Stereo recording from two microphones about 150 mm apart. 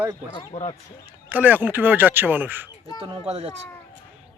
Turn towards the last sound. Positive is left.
turn(degrees=-45)  # may be behind; listen again after turning